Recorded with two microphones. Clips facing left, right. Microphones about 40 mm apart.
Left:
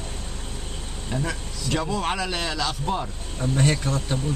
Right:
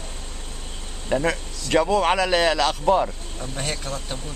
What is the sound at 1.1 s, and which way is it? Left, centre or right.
Speech, right.